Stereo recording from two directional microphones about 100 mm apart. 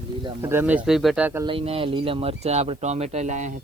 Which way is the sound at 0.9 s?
Centre (ahead or behind).